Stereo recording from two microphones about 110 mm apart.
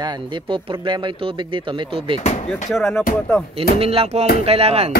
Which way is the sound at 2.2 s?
90° left.